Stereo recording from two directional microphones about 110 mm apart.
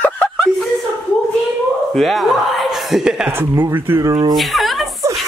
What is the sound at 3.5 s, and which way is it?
Speech, 20° right (ahead or behind).